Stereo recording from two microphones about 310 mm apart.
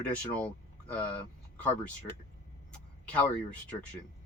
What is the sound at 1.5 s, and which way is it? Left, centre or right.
Speech, centre.